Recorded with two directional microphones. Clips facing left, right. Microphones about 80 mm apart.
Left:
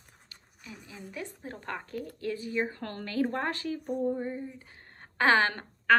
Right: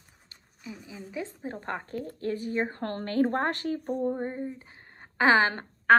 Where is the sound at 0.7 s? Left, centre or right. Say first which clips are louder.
Right 4 dB; centre; by 3.9 s right.